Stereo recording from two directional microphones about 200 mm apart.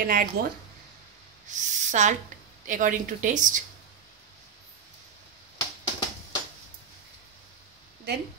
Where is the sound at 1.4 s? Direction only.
35° right (ahead or behind).